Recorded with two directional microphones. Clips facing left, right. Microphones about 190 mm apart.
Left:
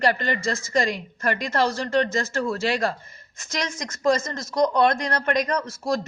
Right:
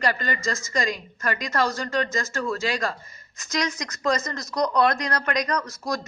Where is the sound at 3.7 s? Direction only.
25° left (ahead or behind).